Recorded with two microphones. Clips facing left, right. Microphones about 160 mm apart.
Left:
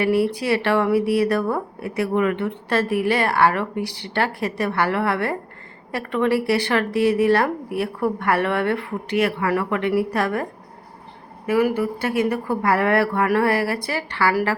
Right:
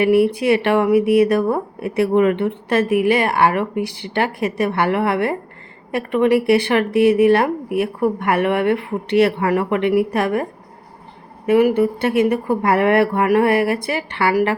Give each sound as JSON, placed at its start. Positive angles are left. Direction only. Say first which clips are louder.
{"t": 0.0, "sound": "a woman's voice", "louder": "right 5 dB", "side_deg": -20}
{"t": 11.4, "sound": "a woman's voice", "louder": "right 5 dB", "side_deg": -25}